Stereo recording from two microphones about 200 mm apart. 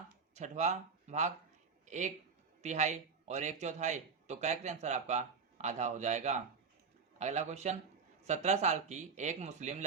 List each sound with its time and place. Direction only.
0.1 s a man's voice: 35° right (ahead or behind)